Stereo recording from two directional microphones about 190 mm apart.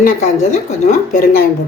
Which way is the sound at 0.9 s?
50° left (ahead or behind).